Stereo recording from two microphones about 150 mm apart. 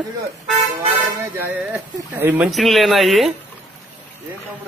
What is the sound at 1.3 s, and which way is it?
Speech, 10° right (ahead or behind).